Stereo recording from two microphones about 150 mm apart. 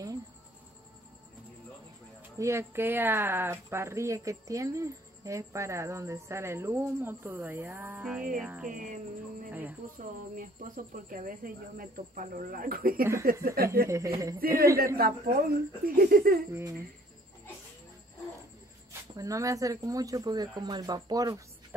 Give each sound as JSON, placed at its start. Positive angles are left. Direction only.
{"t": 2.3, "sound": "speech", "side_deg": -20}
{"t": 8.6, "sound": "speech", "side_deg": -60}
{"t": 9.5, "sound": "speech", "side_deg": -10}
{"t": 9.8, "sound": "speech", "side_deg": -65}
{"t": 13.8, "sound": "speech", "side_deg": -20}
{"t": 15.0, "sound": "speech", "side_deg": -75}
{"t": 16.5, "sound": "speech", "side_deg": -15}
{"t": 18.9, "sound": "speech", "side_deg": -20}